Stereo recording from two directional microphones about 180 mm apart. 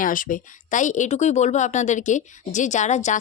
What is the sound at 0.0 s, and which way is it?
A woman's voice, 50° left (ahead or behind).